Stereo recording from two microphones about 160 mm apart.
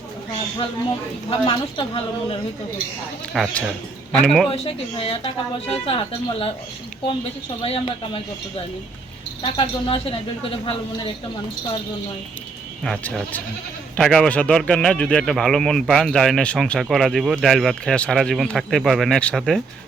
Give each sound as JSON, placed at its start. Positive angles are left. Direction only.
{"t": 1.3, "sound": "a woman's voice", "side_deg": 35}
{"t": 3.3, "sound": "a man's voice", "side_deg": 0}
{"t": 4.4, "sound": "a woman's voice", "side_deg": 35}
{"t": 7.6, "sound": "a woman's voice", "side_deg": 35}
{"t": 9.4, "sound": "a woman's voice", "side_deg": 35}
{"t": 12.8, "sound": "a man's voice", "side_deg": 0}